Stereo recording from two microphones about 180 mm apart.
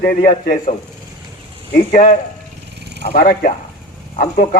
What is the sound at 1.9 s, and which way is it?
A man's voice, 50° left (ahead or behind).